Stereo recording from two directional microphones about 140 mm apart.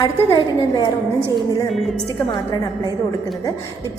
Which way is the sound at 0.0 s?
30° left (ahead or behind).